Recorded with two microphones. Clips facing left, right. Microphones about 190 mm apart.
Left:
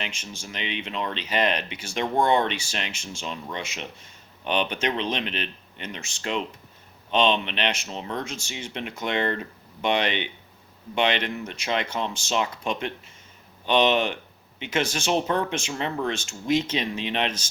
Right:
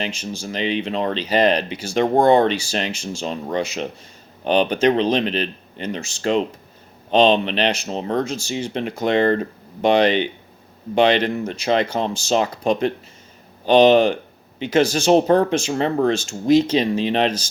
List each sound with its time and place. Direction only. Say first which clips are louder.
0.0 s speech: right 9 dB; 35° right (ahead or behind)